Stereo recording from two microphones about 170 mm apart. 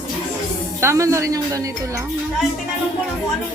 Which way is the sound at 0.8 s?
15° right (ahead or behind).